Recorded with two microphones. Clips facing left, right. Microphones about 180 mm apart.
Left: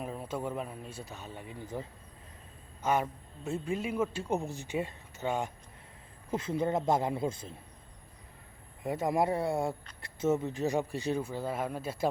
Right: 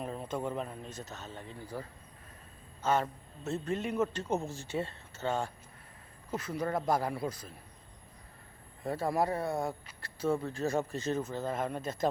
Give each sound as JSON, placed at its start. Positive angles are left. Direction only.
{"t": 0.0, "sound": "speech", "side_deg": 5}
{"t": 6.3, "sound": "speech", "side_deg": 25}
{"t": 8.8, "sound": "speech", "side_deg": 15}